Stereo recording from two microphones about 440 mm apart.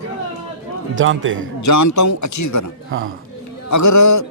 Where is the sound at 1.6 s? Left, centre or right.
Left.